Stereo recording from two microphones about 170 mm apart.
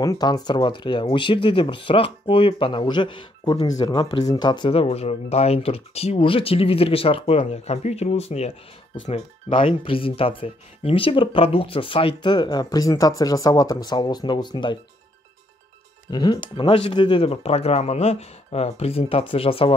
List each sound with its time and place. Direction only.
0.0 s speech: 20° left (ahead or behind)
16.1 s speech: 25° left (ahead or behind)